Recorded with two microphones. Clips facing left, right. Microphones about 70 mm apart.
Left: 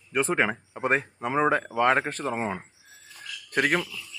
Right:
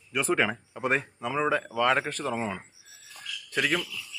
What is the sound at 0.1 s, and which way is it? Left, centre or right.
Speech, left.